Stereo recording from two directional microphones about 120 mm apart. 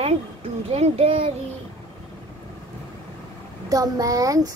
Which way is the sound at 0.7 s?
60° right (ahead or behind).